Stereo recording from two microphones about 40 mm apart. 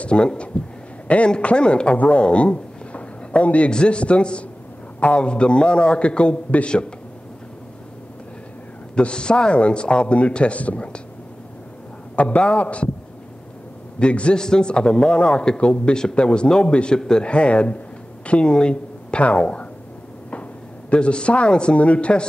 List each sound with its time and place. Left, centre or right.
0.1 s a man's voice: left
8.9 s a man's voice: left
12.2 s a man's voice: left
13.9 s a man's voice: left
20.9 s a man's voice: left